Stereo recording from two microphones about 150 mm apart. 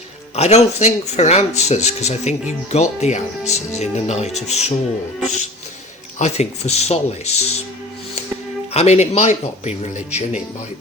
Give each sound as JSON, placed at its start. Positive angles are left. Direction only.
{"t": 0.3, "sound": "speech", "side_deg": 45}
{"t": 6.1, "sound": "speech", "side_deg": 45}
{"t": 8.7, "sound": "speech", "side_deg": 45}